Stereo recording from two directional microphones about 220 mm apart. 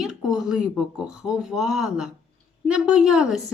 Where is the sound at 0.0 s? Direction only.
Centre (ahead or behind).